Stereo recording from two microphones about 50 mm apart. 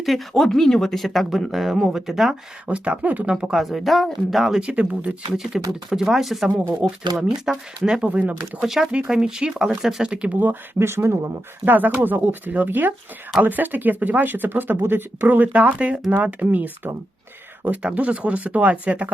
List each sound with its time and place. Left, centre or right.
0.0 s speech: centre
2.6 s speech: right
3.5 s speech: centre
4.6 s speech: right
5.3 s speech: centre
8.0 s speech: right
8.6 s speech: centre
8.9 s speech: centre
10.8 s speech: right
11.6 s speech: right
17.8 s speech: right